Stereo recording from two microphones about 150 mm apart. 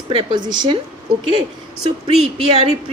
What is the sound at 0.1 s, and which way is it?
Speech, 35° right (ahead or behind).